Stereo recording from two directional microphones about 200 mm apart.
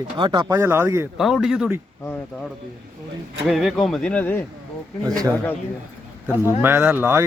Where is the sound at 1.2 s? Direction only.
Centre (ahead or behind).